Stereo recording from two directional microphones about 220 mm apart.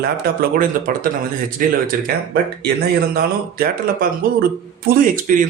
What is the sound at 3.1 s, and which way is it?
Speech, 40° right (ahead or behind).